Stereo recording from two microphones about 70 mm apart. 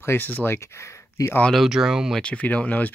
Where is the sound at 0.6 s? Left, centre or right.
Left.